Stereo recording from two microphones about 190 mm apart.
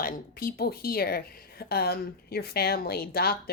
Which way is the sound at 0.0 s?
50° left (ahead or behind).